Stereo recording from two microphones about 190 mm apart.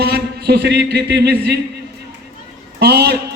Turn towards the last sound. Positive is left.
turn(degrees=-60)  # may be behind; listen again after turning